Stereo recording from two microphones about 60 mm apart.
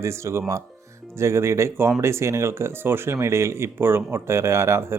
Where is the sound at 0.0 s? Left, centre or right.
Right.